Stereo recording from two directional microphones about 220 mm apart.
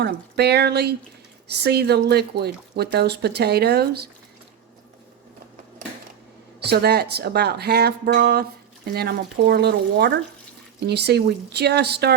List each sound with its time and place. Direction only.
0.0 s speech: 50° right (ahead or behind)
6.6 s speech: 45° right (ahead or behind)